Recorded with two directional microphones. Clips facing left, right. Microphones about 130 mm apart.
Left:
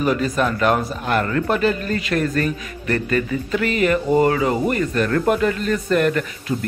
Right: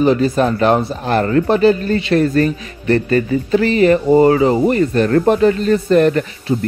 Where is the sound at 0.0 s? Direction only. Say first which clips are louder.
Right 6 dB; 30° right (ahead or behind).